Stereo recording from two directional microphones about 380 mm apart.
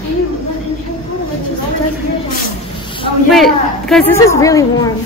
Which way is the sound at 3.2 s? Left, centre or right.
Centre.